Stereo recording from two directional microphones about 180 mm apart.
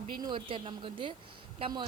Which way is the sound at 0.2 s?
25° right (ahead or behind).